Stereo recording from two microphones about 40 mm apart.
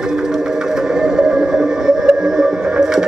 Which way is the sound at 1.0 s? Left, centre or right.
Centre.